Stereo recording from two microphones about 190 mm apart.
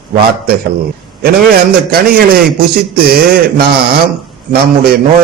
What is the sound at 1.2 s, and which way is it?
A man's voice, 55° right (ahead or behind).